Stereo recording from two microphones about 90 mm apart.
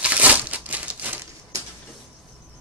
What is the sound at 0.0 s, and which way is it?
Crumpling, 15° right (ahead or behind).